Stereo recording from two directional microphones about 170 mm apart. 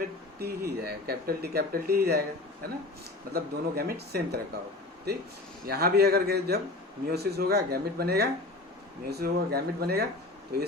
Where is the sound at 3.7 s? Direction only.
65° right (ahead or behind).